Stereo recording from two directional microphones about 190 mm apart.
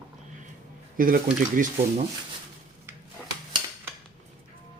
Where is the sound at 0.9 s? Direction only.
45° right (ahead or behind).